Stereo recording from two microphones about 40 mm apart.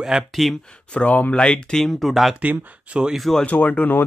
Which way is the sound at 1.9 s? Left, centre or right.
Centre.